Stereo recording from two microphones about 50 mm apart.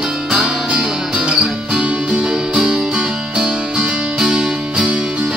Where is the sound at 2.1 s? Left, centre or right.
Centre.